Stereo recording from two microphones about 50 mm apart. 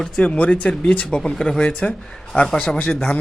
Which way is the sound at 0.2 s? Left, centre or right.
Left.